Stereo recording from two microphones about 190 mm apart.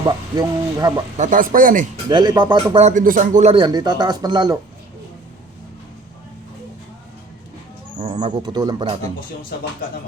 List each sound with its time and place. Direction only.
0.0 s speech: 20° right (ahead or behind)
1.1 s a man's voice: 40° right (ahead or behind)
2.0 s speech: 20° right (ahead or behind)
2.8 s speech: 45° right (ahead or behind)
3.5 s speech: 20° right (ahead or behind)
8.0 s speech: 30° right (ahead or behind)